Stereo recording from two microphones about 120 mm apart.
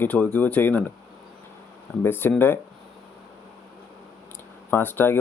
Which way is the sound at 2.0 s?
15° left (ahead or behind).